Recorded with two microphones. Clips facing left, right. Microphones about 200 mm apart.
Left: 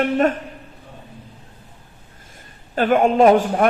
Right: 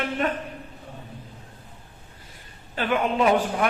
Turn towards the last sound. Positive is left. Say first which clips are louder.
# left 7 dB
turn(degrees=45)  # may be behind; listen again after turning